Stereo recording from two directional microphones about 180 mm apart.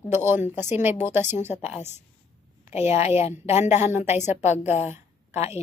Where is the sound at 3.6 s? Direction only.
15° right (ahead or behind).